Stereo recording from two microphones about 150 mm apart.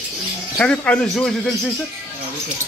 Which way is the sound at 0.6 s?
5° left (ahead or behind).